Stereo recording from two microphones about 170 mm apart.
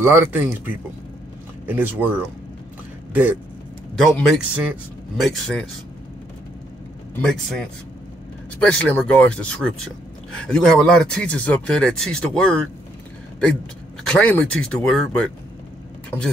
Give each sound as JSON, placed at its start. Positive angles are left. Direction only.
{"t": 0.0, "sound": "speech", "side_deg": -15}
{"t": 3.9, "sound": "speech", "side_deg": 0}
{"t": 7.2, "sound": "speech", "side_deg": 5}
{"t": 14.0, "sound": "speech", "side_deg": 5}